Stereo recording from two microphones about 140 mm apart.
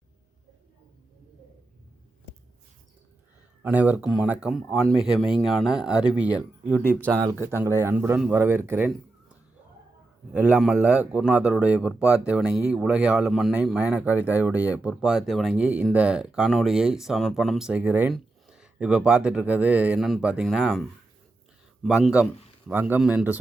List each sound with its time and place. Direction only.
3.6 s speech: 10° right (ahead or behind)
7.1 s speech: 25° right (ahead or behind)
10.3 s speech: 10° right (ahead or behind)
21.8 s speech: 5° right (ahead or behind)